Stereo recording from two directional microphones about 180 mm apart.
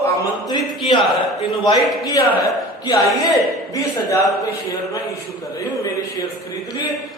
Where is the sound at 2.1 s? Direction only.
20° left (ahead or behind).